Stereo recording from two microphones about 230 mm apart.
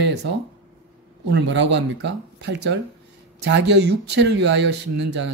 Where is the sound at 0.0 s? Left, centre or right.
Right.